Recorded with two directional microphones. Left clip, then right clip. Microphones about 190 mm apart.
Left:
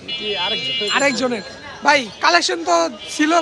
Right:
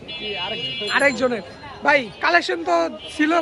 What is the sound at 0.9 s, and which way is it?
A man's voice, 5° left (ahead or behind).